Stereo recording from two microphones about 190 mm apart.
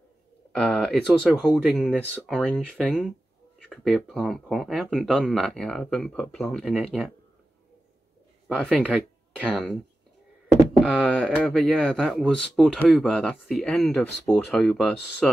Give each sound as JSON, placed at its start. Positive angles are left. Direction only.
{"t": 0.5, "sound": "speech", "side_deg": 5}
{"t": 8.5, "sound": "speech", "side_deg": 0}
{"t": 10.8, "sound": "speech", "side_deg": 0}